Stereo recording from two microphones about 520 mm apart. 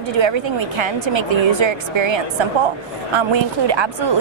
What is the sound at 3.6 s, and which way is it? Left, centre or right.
Speech, right.